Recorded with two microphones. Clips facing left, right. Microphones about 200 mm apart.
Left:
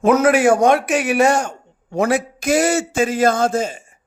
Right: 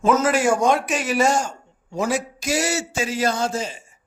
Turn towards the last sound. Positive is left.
turn(degrees=50)  # may be behind; listen again after turning